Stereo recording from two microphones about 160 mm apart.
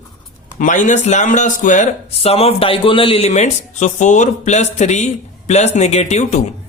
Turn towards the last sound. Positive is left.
turn(degrees=45)  # may be behind; listen again after turning